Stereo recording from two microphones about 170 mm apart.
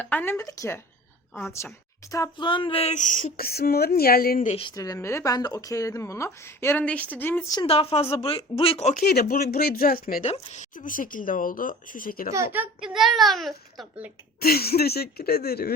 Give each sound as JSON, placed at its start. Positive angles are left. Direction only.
{"t": 0.0, "sound": "speech", "side_deg": 10}
{"t": 4.6, "sound": "speech", "side_deg": 20}
{"t": 7.5, "sound": "speech", "side_deg": 30}
{"t": 9.0, "sound": "speech", "side_deg": 65}
{"t": 10.2, "sound": "speech", "side_deg": 40}
{"t": 12.3, "sound": "a woman's voice", "side_deg": -15}
{"t": 12.8, "sound": "a child's voice", "side_deg": 0}
{"t": 14.4, "sound": "speech", "side_deg": 65}